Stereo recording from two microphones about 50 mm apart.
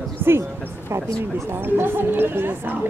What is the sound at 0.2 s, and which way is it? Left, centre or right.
Speech, right.